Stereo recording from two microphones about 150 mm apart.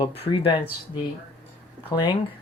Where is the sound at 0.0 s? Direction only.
35° left (ahead or behind).